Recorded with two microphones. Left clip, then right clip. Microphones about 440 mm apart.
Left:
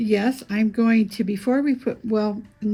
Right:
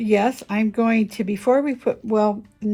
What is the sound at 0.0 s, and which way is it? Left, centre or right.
Speech, centre.